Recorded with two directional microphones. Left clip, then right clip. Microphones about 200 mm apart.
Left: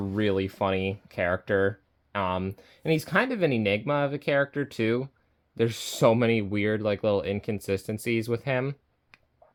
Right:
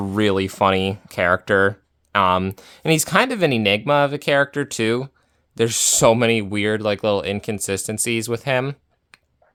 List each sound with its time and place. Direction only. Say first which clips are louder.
0.0 s speech: right 7 dB; 30° right (ahead or behind)